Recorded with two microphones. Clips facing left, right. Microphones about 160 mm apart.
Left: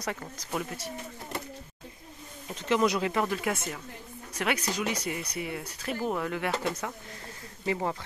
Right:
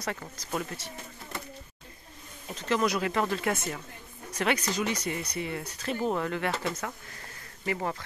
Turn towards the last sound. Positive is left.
turn(degrees=20)  # may be behind; listen again after turning